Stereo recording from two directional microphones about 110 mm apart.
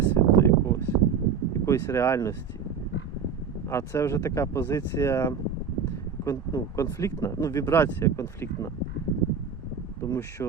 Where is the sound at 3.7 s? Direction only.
25° left (ahead or behind).